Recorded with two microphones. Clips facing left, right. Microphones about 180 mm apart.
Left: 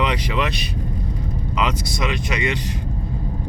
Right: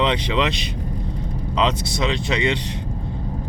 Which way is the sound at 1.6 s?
25° right (ahead or behind).